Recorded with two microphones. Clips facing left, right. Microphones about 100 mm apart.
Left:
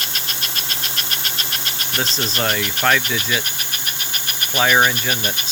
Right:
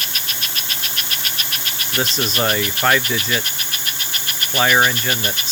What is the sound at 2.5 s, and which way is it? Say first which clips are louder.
Speech: even; 10° right (ahead or behind).